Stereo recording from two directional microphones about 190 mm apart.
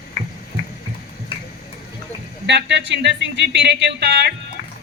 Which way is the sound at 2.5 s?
65° right (ahead or behind).